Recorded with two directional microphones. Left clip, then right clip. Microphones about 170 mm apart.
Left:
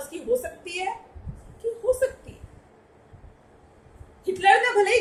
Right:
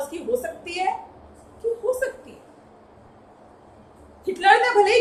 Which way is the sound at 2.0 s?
60° left (ahead or behind).